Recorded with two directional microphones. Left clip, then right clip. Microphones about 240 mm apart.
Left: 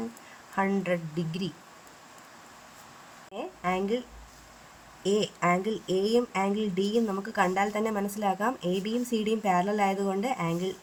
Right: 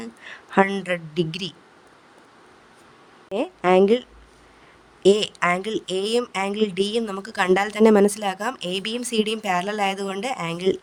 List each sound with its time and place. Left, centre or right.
0.5 s speech: right
3.3 s speech: right
5.0 s speech: right